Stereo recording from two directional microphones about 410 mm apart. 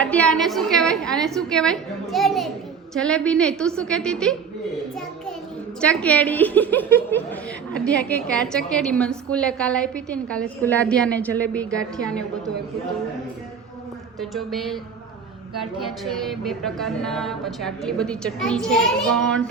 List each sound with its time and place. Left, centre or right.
0.0 s a woman's voice: centre
5.8 s a woman's voice: centre
14.2 s a woman's voice: centre
15.8 s a woman's voice: centre